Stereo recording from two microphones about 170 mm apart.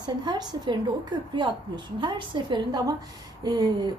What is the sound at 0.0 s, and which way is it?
Speech, 25° right (ahead or behind).